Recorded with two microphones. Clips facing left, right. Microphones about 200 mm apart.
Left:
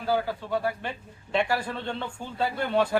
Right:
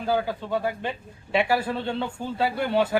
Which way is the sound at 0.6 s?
20° right (ahead or behind).